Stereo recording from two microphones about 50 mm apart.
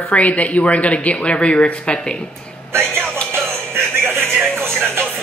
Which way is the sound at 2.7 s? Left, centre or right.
Right.